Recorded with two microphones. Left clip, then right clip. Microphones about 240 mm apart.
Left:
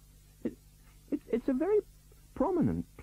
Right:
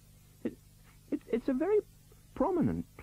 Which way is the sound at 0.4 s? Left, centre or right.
Centre.